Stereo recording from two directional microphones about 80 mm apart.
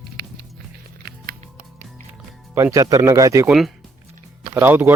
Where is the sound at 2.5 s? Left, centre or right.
Right.